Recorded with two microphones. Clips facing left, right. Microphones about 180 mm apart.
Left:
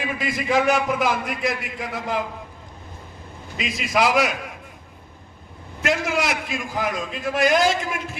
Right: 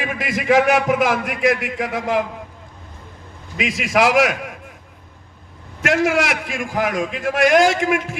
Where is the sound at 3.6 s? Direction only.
90° right.